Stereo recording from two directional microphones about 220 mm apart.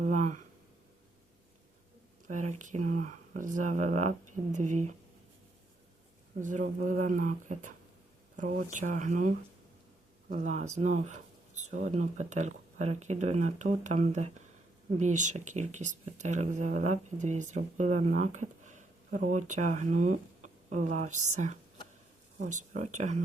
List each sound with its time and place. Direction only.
0.0 s a sound: 35° right (ahead or behind)
2.2 s speech: 35° right (ahead or behind)
6.4 s speech: 35° right (ahead or behind)